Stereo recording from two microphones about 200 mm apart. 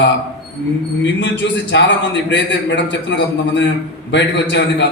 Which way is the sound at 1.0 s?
60° left (ahead or behind).